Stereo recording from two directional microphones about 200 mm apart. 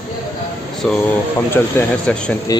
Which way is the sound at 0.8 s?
5° left (ahead or behind).